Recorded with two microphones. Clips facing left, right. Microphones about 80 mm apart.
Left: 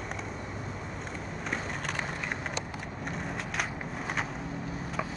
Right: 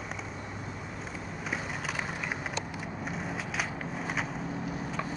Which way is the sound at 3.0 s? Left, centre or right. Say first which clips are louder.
Left 1 dB; centre.